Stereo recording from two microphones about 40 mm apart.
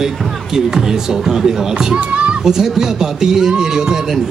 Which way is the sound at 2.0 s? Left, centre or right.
Right.